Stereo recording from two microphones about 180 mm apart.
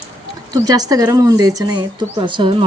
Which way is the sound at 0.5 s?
20° right (ahead or behind).